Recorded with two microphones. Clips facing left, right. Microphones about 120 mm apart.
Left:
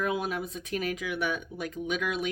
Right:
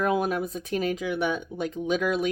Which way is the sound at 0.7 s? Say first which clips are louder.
Right 4 dB; 30° right (ahead or behind).